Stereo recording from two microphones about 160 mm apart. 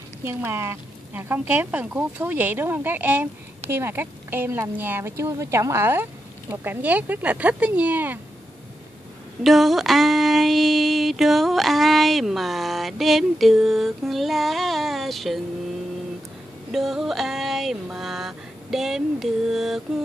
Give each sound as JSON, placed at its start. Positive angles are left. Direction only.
{"t": 0.2, "sound": "a woman's voice", "side_deg": -15}
{"t": 9.4, "sound": "female singing", "side_deg": 0}
{"t": 16.7, "sound": "a sound", "side_deg": 0}